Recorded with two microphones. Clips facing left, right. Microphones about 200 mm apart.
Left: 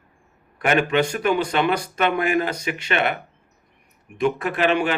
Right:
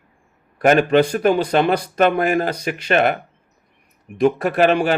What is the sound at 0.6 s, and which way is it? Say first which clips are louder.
Speech: right 6 dB; 40° right (ahead or behind).